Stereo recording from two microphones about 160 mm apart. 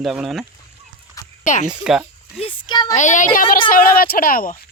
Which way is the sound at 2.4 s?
30° left (ahead or behind).